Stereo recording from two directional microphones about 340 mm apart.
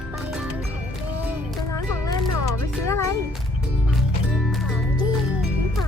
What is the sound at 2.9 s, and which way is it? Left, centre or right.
Child singing, centre.